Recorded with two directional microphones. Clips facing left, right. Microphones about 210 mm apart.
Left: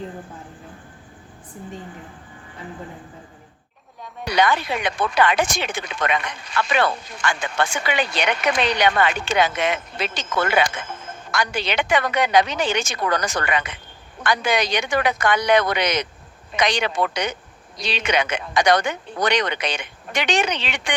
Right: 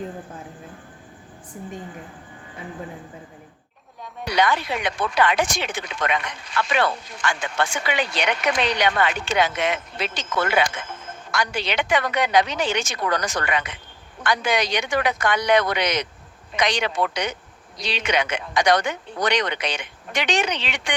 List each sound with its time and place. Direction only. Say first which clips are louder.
4.3 s speech: left 2 dB; 55° left (ahead or behind)